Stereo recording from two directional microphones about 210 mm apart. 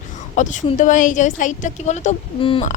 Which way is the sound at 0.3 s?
35° left (ahead or behind).